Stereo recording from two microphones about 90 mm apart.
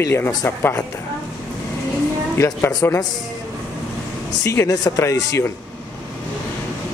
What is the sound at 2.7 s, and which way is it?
Speech, 45° left (ahead or behind).